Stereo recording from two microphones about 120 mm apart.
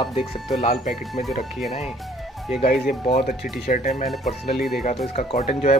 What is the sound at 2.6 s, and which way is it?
Speech, 70° left (ahead or behind).